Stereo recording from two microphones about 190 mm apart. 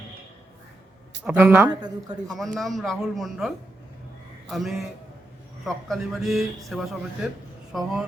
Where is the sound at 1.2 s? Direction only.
10° right (ahead or behind).